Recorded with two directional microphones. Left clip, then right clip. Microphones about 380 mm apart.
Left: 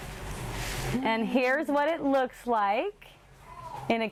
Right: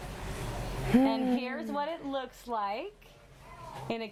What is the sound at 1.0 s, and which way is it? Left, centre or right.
A woman's voice, left.